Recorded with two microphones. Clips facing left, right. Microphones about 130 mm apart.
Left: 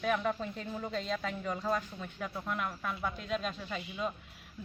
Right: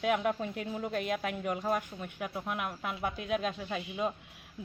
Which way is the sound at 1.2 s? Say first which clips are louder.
Right 2 dB; 65° right (ahead or behind).